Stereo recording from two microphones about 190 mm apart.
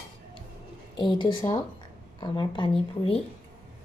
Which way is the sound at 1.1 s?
25° left (ahead or behind).